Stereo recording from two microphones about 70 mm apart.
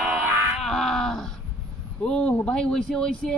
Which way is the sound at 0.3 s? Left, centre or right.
Right.